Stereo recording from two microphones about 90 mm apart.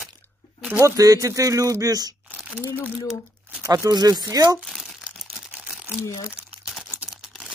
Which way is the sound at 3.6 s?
35° right (ahead or behind).